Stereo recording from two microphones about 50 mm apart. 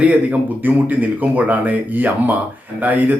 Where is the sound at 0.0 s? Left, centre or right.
Right.